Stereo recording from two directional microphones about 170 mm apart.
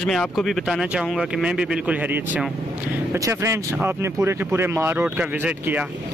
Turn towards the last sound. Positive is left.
turn(degrees=-10)  # may be behind; listen again after turning